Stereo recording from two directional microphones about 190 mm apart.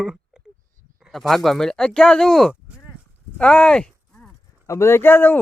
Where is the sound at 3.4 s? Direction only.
5° left (ahead or behind).